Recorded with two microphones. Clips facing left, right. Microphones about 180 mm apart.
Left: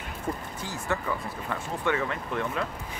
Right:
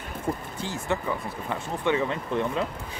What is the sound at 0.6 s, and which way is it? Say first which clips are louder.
Speech: right 2 dB; 25° right (ahead or behind).